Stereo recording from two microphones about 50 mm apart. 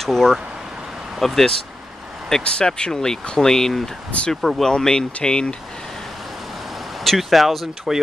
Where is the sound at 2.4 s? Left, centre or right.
Centre.